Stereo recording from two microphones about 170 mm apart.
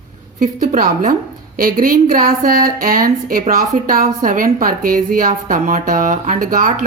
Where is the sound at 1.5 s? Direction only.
55° right (ahead or behind).